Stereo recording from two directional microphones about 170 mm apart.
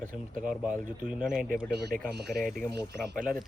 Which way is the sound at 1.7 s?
75° right (ahead or behind).